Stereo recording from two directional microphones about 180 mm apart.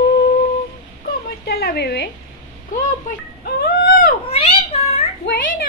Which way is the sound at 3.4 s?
55° left (ahead or behind).